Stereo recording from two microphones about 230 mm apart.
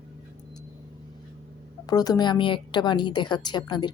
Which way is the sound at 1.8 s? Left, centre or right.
Centre.